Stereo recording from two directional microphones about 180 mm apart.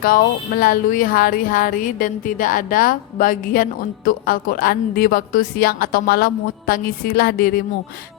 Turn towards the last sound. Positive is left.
turn(degrees=60)  # may be behind; listen again after turning